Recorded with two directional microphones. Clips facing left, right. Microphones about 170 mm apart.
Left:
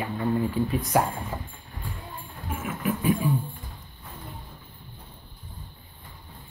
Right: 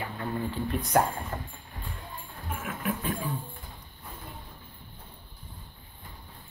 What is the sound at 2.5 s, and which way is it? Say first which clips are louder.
Music: left 4 dB; centre (ahead or behind).